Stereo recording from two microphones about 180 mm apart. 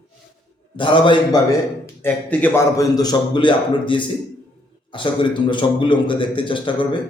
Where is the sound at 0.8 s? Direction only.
25° left (ahead or behind).